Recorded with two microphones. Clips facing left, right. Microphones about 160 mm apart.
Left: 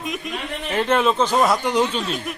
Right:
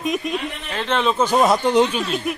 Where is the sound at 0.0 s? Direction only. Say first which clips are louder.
Right 6 dB; 20° right (ahead or behind).